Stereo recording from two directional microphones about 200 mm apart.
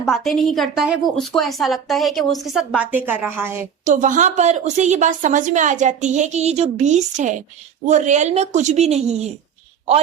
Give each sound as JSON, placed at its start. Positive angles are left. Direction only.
{"t": 0.1, "sound": "a woman's voice", "side_deg": 0}
{"t": 3.8, "sound": "a woman's voice", "side_deg": -40}